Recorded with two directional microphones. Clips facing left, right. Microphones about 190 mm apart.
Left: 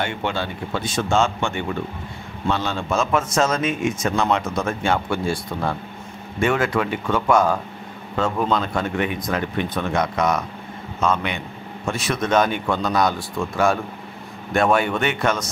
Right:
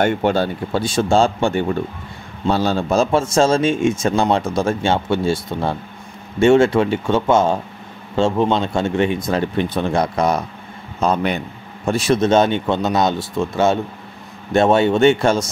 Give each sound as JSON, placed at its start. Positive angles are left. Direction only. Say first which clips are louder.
{"t": 0.0, "sound": "a man's voice", "louder": "right 8 dB", "side_deg": -45}